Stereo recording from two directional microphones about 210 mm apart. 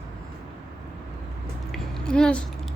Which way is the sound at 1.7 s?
5° left (ahead or behind).